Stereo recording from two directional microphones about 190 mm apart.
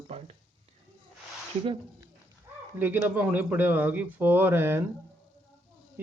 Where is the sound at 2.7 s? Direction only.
10° right (ahead or behind).